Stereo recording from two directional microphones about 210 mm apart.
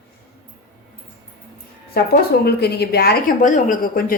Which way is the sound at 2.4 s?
50° left (ahead or behind).